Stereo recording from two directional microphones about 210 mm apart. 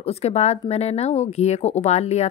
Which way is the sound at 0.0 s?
30° left (ahead or behind).